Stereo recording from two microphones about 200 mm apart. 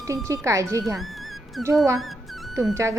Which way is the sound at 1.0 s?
Centre (ahead or behind).